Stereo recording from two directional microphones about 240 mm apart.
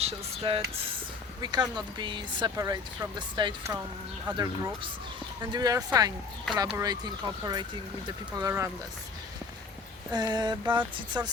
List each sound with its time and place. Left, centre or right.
0.0 s a sound: right
1.4 s speech: centre
10.1 s speech: centre